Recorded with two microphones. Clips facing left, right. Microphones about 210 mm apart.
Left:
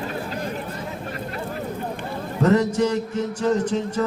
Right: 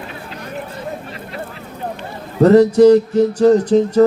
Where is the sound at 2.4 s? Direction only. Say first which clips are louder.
Right 11 dB; 35° right (ahead or behind).